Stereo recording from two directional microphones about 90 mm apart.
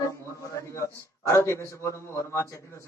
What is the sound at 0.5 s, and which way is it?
Speech, 35° left (ahead or behind).